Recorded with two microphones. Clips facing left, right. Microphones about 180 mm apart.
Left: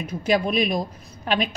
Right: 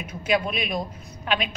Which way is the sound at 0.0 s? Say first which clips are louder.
Left 3 dB; 40° left (ahead or behind).